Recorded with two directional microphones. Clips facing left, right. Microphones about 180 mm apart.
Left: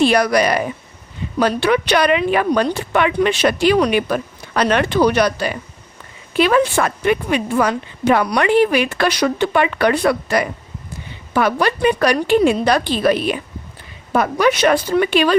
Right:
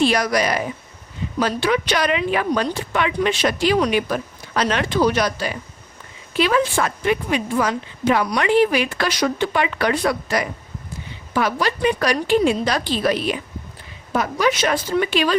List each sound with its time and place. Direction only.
0.0 s a woman's voice: 60° left (ahead or behind)